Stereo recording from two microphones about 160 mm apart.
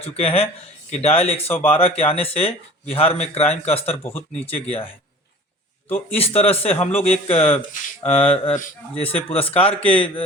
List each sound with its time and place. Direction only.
0.0 s speech: 40° left (ahead or behind)
4.0 s speech: 15° left (ahead or behind)
5.9 s speech: 40° left (ahead or behind)